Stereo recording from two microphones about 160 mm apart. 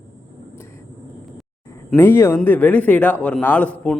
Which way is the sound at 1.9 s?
15° left (ahead or behind).